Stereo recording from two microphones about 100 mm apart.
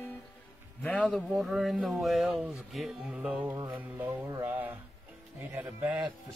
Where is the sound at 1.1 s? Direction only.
Centre (ahead or behind).